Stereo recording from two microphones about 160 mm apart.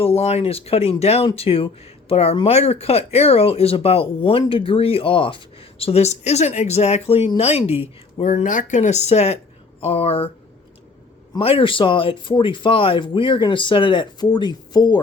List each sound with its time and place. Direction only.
0.0 s speech: 40° left (ahead or behind)
11.3 s speech: 35° left (ahead or behind)